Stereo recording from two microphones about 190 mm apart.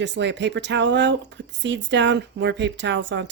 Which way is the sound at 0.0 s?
65° right (ahead or behind).